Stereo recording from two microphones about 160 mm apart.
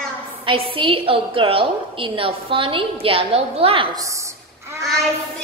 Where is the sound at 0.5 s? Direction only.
35° right (ahead or behind).